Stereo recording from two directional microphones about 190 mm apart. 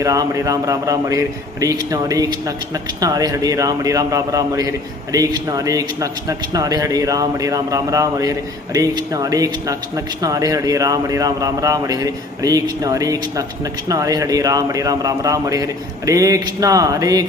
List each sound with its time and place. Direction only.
0.0 s a man's voice: 15° right (ahead or behind)